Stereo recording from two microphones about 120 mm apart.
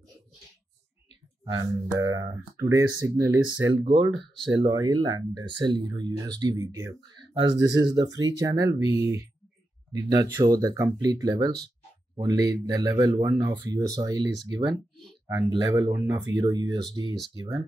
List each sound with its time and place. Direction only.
1.4 s speech: 35° right (ahead or behind)